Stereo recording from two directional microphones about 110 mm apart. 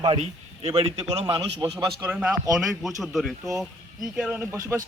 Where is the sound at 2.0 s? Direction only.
15° right (ahead or behind).